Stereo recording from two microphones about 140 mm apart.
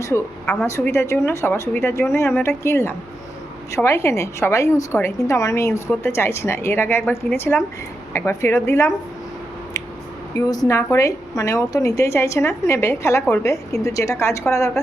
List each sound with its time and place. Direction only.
0.6 s a woman's voice: 20° left (ahead or behind)
10.3 s a woman's voice: 25° left (ahead or behind)